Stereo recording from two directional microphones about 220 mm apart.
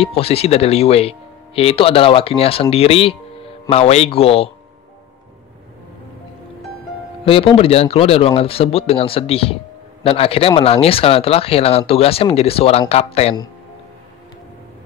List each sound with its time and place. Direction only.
0.0 s speech: 25° left (ahead or behind)
7.2 s speech: 25° left (ahead or behind)